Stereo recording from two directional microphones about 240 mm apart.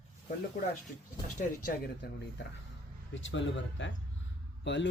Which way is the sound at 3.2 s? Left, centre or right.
Left.